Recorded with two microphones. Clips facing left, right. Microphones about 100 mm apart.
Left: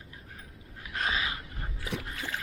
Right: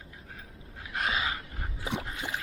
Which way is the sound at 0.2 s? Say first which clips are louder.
Right 1 dB; 30° right (ahead or behind).